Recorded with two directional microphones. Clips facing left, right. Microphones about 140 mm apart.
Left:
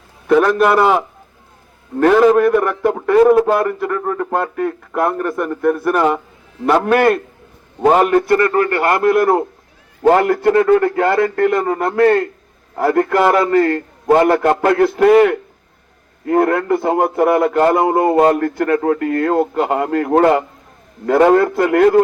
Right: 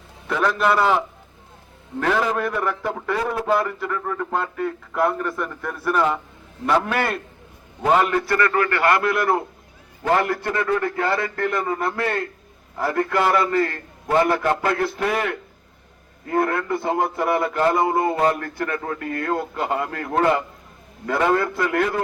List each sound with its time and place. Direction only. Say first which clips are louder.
0.3 s a man's voice: left 8 dB; 50° left (ahead or behind)
8.3 s a man's voice: left 7 dB; 20° left (ahead or behind)
8.7 s a man's voice: left 6 dB; 45° left (ahead or behind)